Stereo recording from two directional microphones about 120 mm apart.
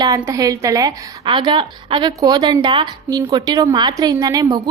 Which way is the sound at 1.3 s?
40° right (ahead or behind).